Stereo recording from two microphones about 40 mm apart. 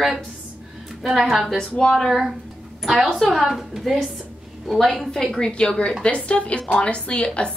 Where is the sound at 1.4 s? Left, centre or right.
Centre.